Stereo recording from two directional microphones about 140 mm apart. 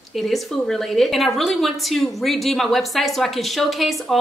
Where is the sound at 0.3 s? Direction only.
Centre (ahead or behind).